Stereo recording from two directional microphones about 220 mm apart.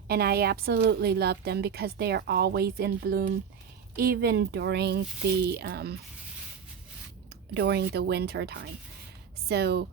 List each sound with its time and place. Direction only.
0.1 s a woman's voice: 45° right (ahead or behind)
7.5 s a woman's voice: 50° right (ahead or behind)